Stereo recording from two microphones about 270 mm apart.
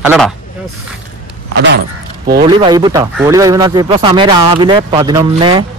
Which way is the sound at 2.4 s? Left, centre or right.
Centre.